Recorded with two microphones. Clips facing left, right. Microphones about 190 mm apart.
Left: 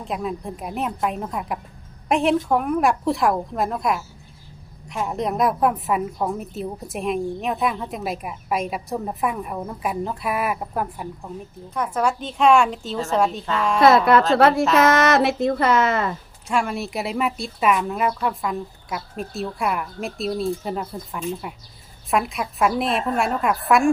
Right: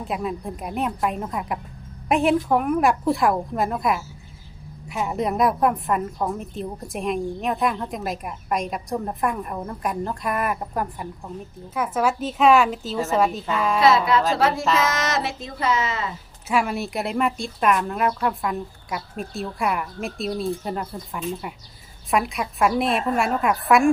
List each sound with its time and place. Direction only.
0.0 s a woman's voice: centre (ahead or behind)
13.8 s speech: 55° left (ahead or behind)
16.5 s a woman's voice: 5° right (ahead or behind)